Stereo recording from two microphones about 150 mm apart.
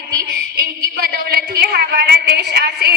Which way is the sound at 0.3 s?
90° right.